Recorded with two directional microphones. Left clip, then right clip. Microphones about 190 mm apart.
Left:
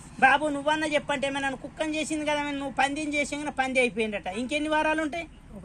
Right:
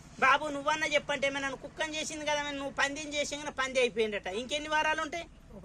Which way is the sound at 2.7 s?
20° right (ahead or behind).